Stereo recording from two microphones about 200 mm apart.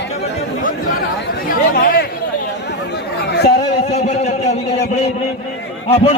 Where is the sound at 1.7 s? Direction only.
50° left (ahead or behind).